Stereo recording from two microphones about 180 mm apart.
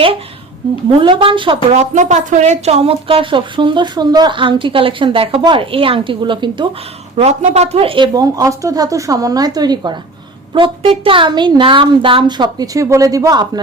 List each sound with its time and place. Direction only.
0.9 s a woman's voice: 30° right (ahead or behind)
1.7 s a woman's voice: 40° right (ahead or behind)
7.2 s a woman's voice: 40° right (ahead or behind); by 13.6 s 20° right (ahead or behind)